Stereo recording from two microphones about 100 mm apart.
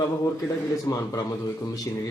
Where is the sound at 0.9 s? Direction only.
35° left (ahead or behind).